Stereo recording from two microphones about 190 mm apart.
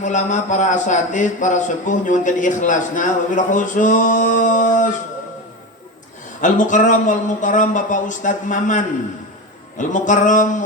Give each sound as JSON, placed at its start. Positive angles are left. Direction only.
{"t": 0.0, "sound": "a man's voice", "side_deg": 40}
{"t": 6.4, "sound": "a man's voice", "side_deg": 40}